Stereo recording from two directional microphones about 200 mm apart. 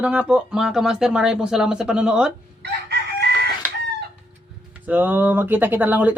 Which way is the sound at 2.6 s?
55° right (ahead or behind).